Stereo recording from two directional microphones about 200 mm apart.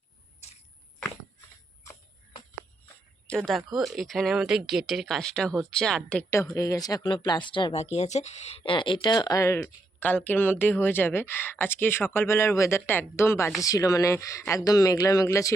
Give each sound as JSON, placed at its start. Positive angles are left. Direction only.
{"t": 3.2, "sound": "speech", "side_deg": 0}